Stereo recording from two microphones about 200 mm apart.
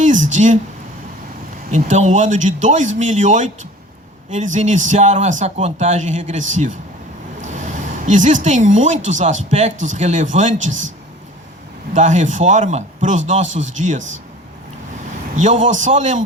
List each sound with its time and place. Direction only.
0.0 s a sound: 40° right (ahead or behind)
1.7 s a man's voice: 40° right (ahead or behind)
7.4 s speech: 40° right (ahead or behind)
11.9 s a man's voice: 40° right (ahead or behind)
15.4 s a man's voice: 40° right (ahead or behind)